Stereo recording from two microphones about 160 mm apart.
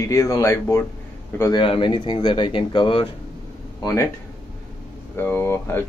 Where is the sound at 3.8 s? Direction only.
20° left (ahead or behind).